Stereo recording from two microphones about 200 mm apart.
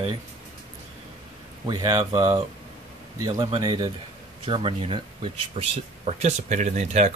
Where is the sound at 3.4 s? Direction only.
25° right (ahead or behind).